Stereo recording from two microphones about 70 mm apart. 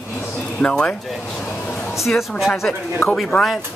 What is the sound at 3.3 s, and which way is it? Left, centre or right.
Speech, left.